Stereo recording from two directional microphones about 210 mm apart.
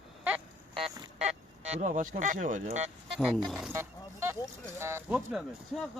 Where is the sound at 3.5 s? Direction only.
Centre (ahead or behind).